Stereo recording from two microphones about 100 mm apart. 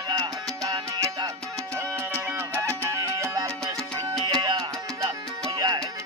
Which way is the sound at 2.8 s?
30° right (ahead or behind).